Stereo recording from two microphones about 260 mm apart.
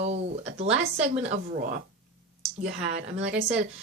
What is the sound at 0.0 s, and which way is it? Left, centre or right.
Speech, right.